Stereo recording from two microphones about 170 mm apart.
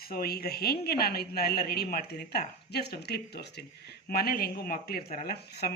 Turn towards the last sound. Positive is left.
turn(degrees=65)  # may be behind; listen again after turning